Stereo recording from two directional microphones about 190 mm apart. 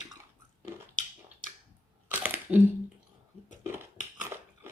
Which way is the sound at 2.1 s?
10° right (ahead or behind).